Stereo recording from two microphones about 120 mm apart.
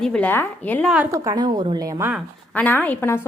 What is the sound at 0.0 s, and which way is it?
Speech, 5° left (ahead or behind).